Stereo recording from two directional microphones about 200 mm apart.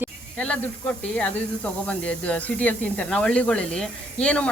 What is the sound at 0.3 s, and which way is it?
Speech, 5° left (ahead or behind).